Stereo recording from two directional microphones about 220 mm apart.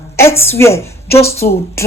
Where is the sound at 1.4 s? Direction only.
40° left (ahead or behind).